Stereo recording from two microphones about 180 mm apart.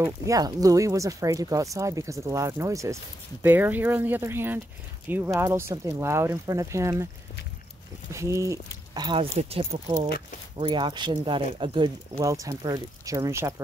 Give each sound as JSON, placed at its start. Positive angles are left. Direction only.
{"t": 0.0, "sound": "speech", "side_deg": -20}
{"t": 8.1, "sound": "speech", "side_deg": -15}